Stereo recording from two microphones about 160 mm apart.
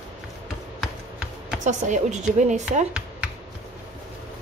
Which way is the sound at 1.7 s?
50° right (ahead or behind).